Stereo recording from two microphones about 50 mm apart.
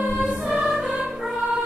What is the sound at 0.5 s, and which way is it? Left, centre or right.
Music, centre.